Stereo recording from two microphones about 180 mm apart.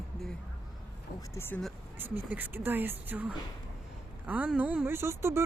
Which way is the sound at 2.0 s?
10° right (ahead or behind).